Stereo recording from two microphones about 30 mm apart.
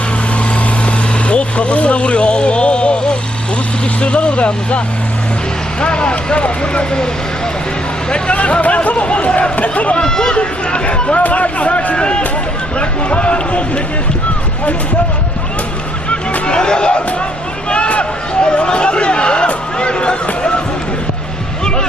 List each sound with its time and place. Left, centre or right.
0.9 s vehicle: left
4.0 s speech: left
5.8 s speech: left
8.3 s speech: left
9.7 s speech: left
10.0 s speech: left
10.3 s speech: left
11.2 s speech: left
11.9 s speech: left
12.8 s speech: left
16.5 s speech: left
17.7 s a sound: left
18.4 s speech: left